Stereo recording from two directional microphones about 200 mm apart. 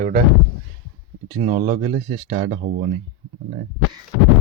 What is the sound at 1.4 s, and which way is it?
Speech, 25° right (ahead or behind).